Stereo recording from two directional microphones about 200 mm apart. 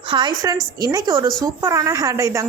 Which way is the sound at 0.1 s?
20° right (ahead or behind).